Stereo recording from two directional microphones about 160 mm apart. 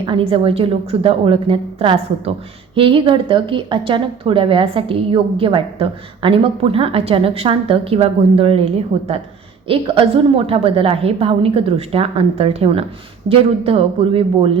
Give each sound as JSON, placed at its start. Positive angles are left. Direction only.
{"t": 0.0, "sound": "a woman's voice", "side_deg": -35}